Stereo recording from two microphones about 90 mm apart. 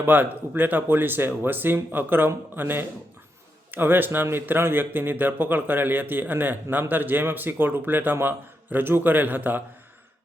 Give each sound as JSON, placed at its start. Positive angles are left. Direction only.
{"t": 0.0, "sound": "speech", "side_deg": -20}